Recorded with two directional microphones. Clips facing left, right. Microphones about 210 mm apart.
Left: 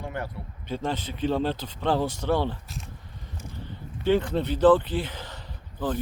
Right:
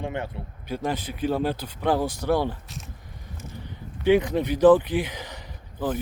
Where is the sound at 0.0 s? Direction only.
25° right (ahead or behind).